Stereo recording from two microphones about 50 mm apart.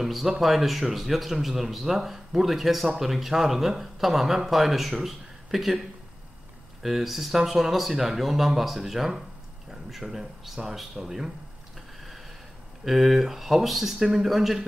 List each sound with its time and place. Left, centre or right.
0.0 s speech: centre
12.8 s speech: centre